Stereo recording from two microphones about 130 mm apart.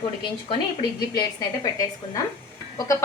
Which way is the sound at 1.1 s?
25° left (ahead or behind).